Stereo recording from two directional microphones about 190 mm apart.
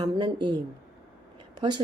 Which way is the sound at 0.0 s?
25° right (ahead or behind).